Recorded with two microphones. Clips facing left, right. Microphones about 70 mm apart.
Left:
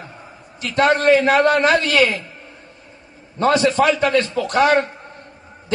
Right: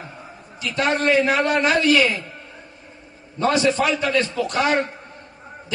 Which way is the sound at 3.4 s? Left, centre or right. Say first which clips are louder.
Left 3 dB; left.